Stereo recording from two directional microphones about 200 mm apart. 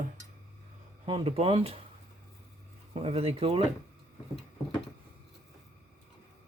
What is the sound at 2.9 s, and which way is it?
Speech, 30° right (ahead or behind).